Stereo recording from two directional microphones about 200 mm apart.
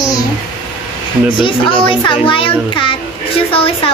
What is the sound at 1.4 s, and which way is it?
Speech, 25° left (ahead or behind).